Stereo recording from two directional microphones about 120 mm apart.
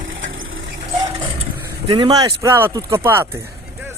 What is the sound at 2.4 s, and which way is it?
Speech, 20° right (ahead or behind).